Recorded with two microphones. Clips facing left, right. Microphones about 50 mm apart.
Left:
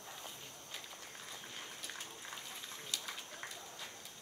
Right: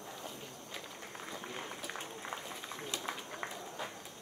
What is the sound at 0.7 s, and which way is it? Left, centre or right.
Run, right.